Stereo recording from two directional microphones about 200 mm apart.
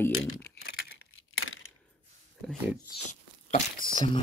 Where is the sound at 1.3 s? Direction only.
90° left.